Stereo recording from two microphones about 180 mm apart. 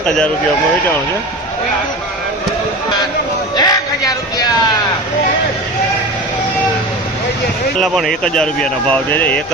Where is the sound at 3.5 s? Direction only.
20° left (ahead or behind).